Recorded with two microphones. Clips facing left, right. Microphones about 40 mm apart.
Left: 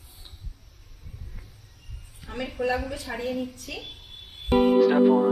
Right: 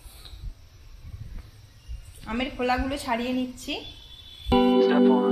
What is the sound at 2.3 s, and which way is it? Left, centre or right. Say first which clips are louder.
Speech: right 5 dB; right.